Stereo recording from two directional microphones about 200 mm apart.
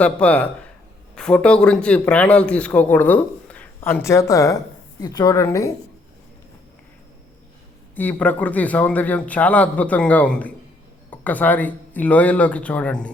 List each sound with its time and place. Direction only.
0.0 s a man's voice: 5° left (ahead or behind)
7.9 s a man's voice: 10° left (ahead or behind)